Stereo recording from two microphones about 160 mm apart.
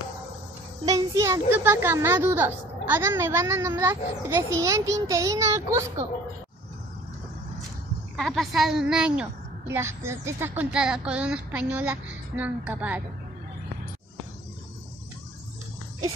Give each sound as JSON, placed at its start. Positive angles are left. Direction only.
{"t": 0.8, "sound": "a woman's voice", "side_deg": -20}
{"t": 8.2, "sound": "a woman's voice", "side_deg": 0}